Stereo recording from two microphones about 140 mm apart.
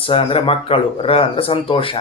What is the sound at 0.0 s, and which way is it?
Speech, 40° left (ahead or behind).